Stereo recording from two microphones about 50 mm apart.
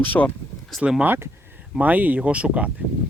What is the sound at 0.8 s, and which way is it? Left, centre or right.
Speech, right.